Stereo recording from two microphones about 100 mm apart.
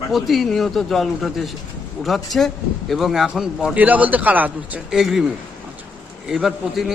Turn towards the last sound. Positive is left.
turn(degrees=-5)  # may be behind; listen again after turning